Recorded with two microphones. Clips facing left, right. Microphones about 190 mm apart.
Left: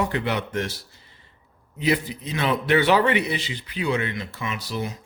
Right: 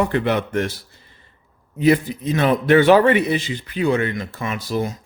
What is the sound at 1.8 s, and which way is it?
A man's voice, 50° right (ahead or behind).